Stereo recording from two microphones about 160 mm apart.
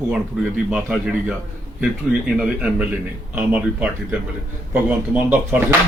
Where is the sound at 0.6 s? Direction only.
5° right (ahead or behind).